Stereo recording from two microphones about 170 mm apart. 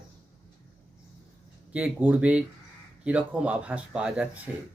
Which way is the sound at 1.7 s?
10° right (ahead or behind).